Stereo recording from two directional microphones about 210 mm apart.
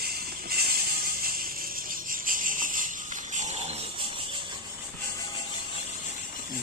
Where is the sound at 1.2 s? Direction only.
45° right (ahead or behind); by 4.4 s 25° right (ahead or behind).